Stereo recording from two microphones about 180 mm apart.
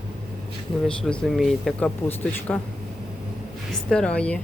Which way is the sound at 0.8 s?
5° left (ahead or behind).